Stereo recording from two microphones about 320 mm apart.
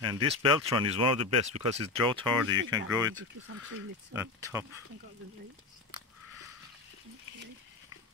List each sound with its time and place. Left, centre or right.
0.0 s speech: centre
1.2 s speech: right
1.6 s speech: centre